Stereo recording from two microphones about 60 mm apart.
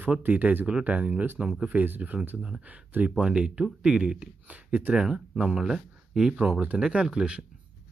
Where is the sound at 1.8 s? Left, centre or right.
Right.